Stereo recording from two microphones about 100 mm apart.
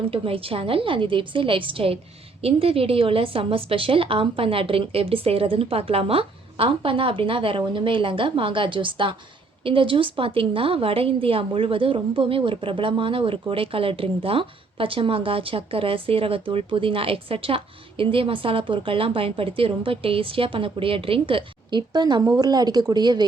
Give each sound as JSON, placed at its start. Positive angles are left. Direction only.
{"t": 0.1, "sound": "a woman's voice", "side_deg": -70}